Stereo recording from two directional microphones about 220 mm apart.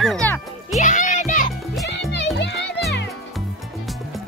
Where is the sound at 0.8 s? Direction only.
35° left (ahead or behind).